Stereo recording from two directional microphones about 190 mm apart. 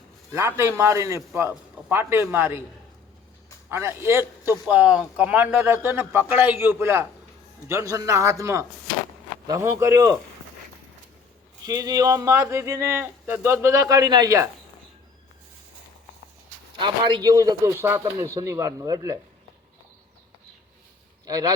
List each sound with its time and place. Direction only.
0.3 s speech: 15° right (ahead or behind)
3.7 s speech: 15° right (ahead or behind)
11.6 s speech: 20° right (ahead or behind)
16.7 s speech: 25° right (ahead or behind)
21.2 s speech: 20° right (ahead or behind)